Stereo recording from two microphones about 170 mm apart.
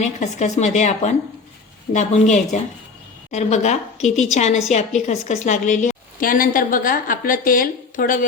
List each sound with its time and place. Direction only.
0.0 s a woman's voice: 45° left (ahead or behind)